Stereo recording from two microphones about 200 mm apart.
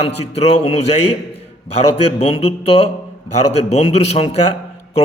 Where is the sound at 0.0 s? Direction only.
30° left (ahead or behind).